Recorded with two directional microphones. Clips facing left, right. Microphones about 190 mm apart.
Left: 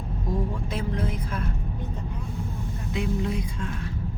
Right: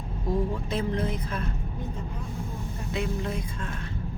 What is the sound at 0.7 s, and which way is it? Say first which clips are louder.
Speech: right 1 dB; 10° left (ahead or behind).